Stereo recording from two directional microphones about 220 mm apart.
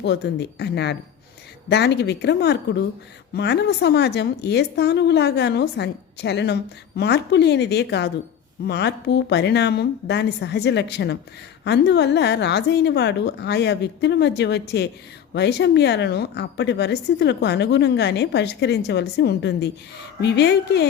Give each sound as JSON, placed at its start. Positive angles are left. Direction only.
{"t": 0.0, "sound": "a woman's voice", "side_deg": 50}